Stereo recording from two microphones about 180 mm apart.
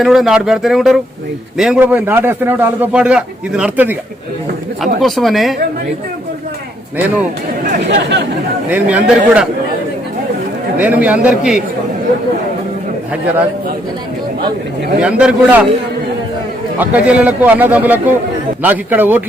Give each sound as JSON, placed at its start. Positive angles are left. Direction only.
{"t": 0.0, "sound": "a man's voice", "side_deg": 0}
{"t": 7.9, "sound": "speech", "side_deg": -75}
{"t": 8.7, "sound": "a man's voice", "side_deg": -10}
{"t": 10.8, "sound": "a man's voice", "side_deg": -10}
{"t": 15.0, "sound": "a man's voice", "side_deg": -5}
{"t": 16.7, "sound": "a man's voice", "side_deg": -10}